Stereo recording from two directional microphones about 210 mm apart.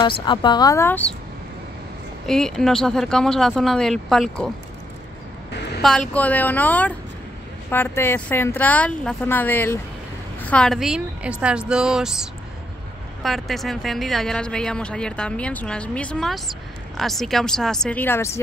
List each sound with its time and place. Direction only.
0.2 s a woman's voice: 20° left (ahead or behind)
2.2 s speech: centre (ahead or behind)
5.8 s a woman's voice: 5° left (ahead or behind)